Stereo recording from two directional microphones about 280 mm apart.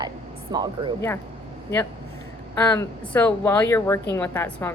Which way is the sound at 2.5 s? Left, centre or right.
Centre.